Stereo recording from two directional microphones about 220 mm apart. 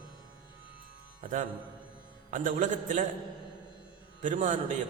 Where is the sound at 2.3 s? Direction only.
35° right (ahead or behind).